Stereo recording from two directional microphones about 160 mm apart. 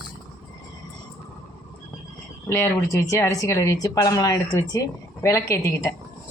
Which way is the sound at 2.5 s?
15° left (ahead or behind).